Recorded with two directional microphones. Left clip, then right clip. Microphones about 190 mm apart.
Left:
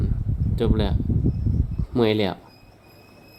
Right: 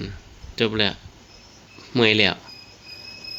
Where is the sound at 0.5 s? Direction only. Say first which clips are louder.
Right 4 dB; 15° left (ahead or behind).